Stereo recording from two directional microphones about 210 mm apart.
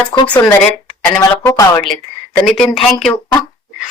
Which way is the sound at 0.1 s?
15° left (ahead or behind).